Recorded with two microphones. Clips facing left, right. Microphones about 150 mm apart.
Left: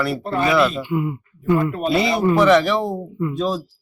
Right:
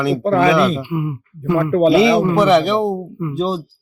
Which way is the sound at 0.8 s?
10° right (ahead or behind).